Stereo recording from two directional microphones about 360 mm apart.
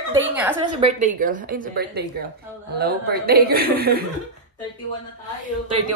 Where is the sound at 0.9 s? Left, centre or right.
Right.